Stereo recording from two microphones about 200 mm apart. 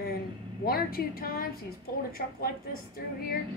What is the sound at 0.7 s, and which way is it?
A woman's voice, 50° left (ahead or behind).